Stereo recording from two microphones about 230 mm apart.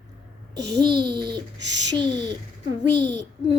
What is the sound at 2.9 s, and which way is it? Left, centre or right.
Speech, right.